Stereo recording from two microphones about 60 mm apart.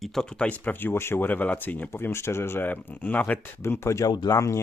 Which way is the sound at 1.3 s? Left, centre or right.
Left.